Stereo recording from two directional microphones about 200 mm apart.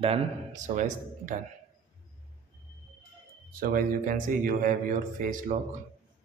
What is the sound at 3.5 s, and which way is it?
Speech, 45° right (ahead or behind).